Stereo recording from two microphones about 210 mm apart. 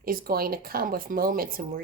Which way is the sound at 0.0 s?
45° right (ahead or behind).